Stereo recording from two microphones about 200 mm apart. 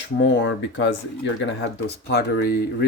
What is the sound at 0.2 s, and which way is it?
Speech, 65° left (ahead or behind).